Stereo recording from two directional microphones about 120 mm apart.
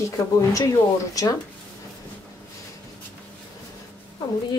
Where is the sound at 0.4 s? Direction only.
25° left (ahead or behind).